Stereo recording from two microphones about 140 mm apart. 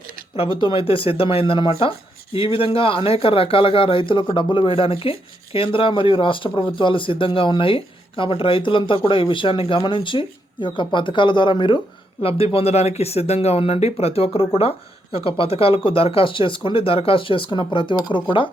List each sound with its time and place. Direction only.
0.3 s speech: 40° left (ahead or behind)